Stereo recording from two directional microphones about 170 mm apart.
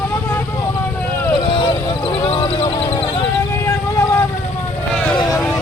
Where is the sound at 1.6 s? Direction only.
30° left (ahead or behind).